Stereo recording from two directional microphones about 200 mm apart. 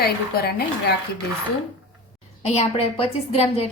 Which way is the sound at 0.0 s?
50° left (ahead or behind).